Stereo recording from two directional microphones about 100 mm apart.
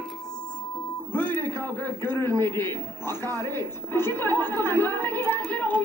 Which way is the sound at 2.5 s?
20° left (ahead or behind).